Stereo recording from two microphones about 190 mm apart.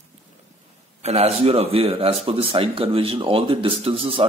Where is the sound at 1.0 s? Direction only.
35° right (ahead or behind).